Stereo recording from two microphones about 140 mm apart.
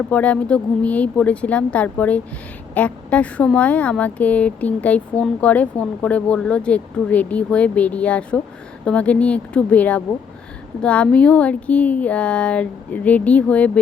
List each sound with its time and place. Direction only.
0.1 s speech: 10° left (ahead or behind)